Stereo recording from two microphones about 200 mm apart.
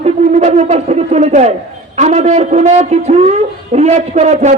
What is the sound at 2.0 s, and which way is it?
A man's voice, 35° right (ahead or behind).